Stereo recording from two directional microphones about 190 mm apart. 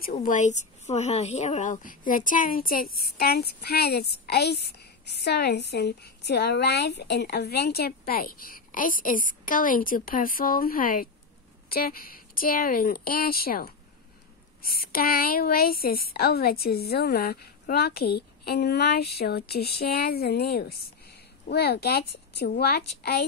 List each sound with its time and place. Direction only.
0.1 s a woman's voice: 40° left (ahead or behind); by 23.2 s 55° left (ahead or behind)